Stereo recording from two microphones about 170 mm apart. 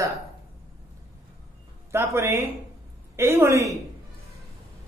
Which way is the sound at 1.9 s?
15° right (ahead or behind).